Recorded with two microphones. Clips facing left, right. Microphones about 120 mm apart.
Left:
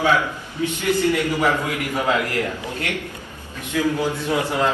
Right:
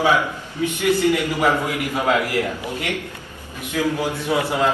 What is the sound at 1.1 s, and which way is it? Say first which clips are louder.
A man's voice: right 1 dB; 15° right (ahead or behind).